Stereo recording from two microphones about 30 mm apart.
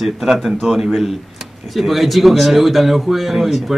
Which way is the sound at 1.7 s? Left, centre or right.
Centre.